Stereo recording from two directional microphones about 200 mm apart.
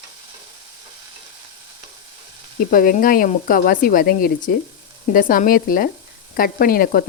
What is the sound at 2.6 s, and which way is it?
Speech, 45° left (ahead or behind).